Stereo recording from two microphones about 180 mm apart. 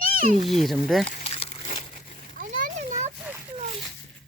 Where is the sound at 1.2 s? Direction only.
35° left (ahead or behind).